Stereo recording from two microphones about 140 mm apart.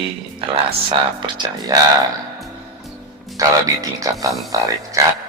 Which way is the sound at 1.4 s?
25° right (ahead or behind).